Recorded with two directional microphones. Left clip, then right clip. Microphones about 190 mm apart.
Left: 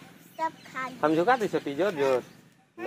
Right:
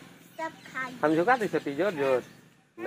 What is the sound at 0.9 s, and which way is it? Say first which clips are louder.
Speech: left 1 dB; centre (ahead or behind).